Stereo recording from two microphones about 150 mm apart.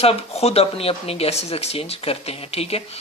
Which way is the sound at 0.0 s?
45° left (ahead or behind).